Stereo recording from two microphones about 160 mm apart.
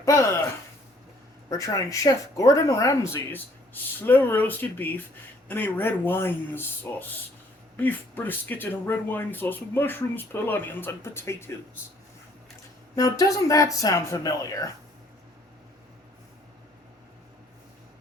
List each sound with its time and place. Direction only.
0.0 s speech: 20° left (ahead or behind)
1.5 s speech: 20° left (ahead or behind)
13.0 s speech: 20° left (ahead or behind)